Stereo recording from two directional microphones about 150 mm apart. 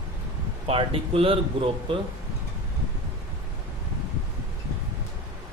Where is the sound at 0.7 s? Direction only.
40° right (ahead or behind).